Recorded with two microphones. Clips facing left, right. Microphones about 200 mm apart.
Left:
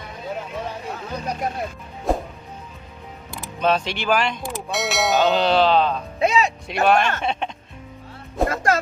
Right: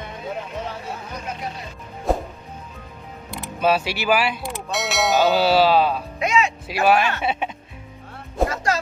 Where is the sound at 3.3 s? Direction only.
5° right (ahead or behind).